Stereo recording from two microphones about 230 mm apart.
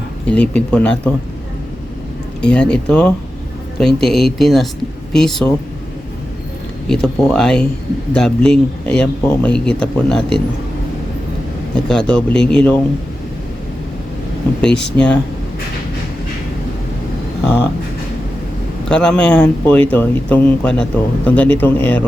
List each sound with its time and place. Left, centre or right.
0.3 s speech: centre
2.4 s speech: centre
6.8 s speech: centre
11.9 s speech: centre
14.6 s speech: centre
18.9 s a man's voice: centre